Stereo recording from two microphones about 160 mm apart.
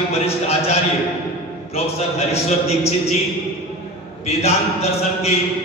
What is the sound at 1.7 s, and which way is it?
A man's voice, 40° left (ahead or behind).